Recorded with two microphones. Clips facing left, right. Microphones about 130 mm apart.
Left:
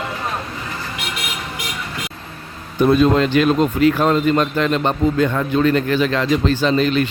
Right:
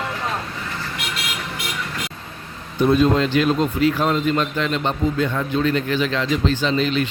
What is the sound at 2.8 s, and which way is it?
Speech, 60° left (ahead or behind).